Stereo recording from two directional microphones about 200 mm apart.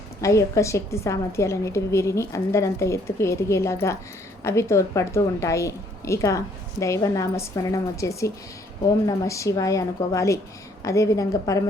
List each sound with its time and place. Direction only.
0.2 s a woman's voice: 15° left (ahead or behind)